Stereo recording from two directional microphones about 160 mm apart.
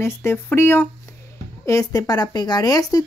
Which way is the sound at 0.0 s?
15° left (ahead or behind).